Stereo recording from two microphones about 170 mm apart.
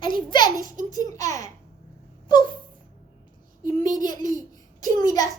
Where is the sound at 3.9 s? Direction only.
25° left (ahead or behind).